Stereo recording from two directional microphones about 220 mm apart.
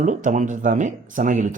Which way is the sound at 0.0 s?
35° right (ahead or behind).